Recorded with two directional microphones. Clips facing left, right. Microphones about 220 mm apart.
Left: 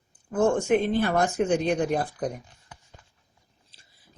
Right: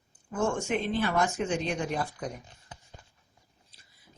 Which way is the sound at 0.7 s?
55° left (ahead or behind).